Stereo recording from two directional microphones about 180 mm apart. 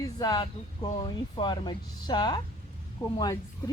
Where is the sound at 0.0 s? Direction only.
20° left (ahead or behind).